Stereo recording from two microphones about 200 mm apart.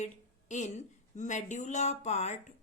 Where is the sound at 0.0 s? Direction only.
35° left (ahead or behind).